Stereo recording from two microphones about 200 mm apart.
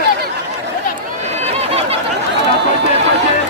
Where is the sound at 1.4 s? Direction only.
30° right (ahead or behind).